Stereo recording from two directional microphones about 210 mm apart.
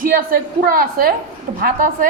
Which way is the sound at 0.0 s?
40° right (ahead or behind).